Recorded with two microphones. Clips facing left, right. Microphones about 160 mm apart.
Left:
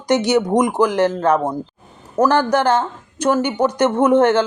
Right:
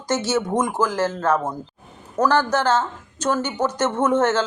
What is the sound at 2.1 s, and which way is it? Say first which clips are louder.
A woman's voice: left 4 dB; 10° left (ahead or behind).